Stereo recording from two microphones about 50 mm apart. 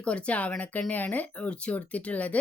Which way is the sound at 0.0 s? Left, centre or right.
Left.